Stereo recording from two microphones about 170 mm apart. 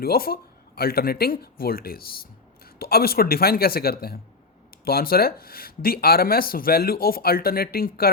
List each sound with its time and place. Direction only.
0.0 s speech: 60° left (ahead or behind)